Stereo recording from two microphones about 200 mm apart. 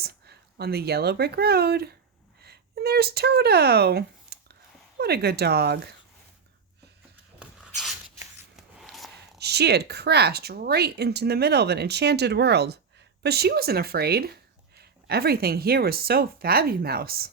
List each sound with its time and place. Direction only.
0.0 s speech: 50° right (ahead or behind)
7.3 s dog: centre (ahead or behind)
8.5 s a sound: centre (ahead or behind)
9.4 s speech: 55° right (ahead or behind)